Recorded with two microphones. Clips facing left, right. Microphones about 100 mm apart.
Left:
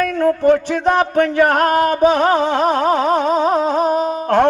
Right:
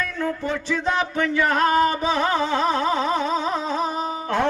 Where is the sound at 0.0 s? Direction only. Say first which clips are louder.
Left 11 dB; 55° left (ahead or behind).